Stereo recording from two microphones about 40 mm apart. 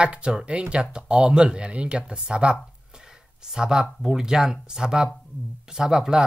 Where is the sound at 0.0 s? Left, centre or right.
Right.